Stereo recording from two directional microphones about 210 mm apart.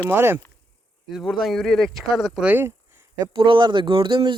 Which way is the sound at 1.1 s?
Centre (ahead or behind).